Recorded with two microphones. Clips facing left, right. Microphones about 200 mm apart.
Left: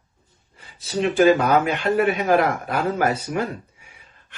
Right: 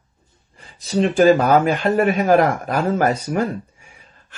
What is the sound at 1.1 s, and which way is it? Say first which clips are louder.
A man's voice: right 2 dB; 40° right (ahead or behind).